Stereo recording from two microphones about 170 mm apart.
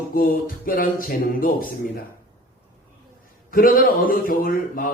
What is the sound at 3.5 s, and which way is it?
A man's voice, 60° left (ahead or behind).